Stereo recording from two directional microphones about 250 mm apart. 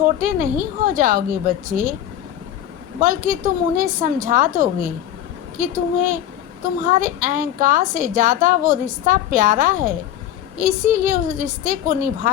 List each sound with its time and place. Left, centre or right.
0.2 s a woman's voice: right
3.0 s a woman's voice: right